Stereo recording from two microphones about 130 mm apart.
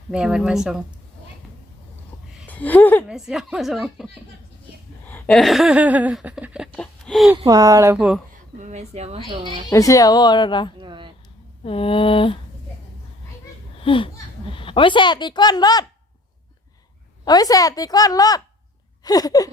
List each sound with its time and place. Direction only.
0.1 s a woman's voice: 5° right (ahead or behind)
2.5 s speech: 10° left (ahead or behind)
3.1 s a woman's voice: 5° right (ahead or behind)
5.0 s a sound: 15° left (ahead or behind)
5.3 s laughter: centre (ahead or behind)
6.7 s a sound: 5° left (ahead or behind)
7.3 s speech: 30° right (ahead or behind)
7.9 s laughter: 5° right (ahead or behind)
8.5 s speech: 65° right (ahead or behind); by 9.6 s 40° right (ahead or behind)
9.6 s speech: 25° left (ahead or behind)
10.8 s speech: 40° right (ahead or behind)
11.6 s speech: 45° left (ahead or behind)
13.7 s speech: 40° left (ahead or behind)
17.2 s a woman's voice: 30° left (ahead or behind)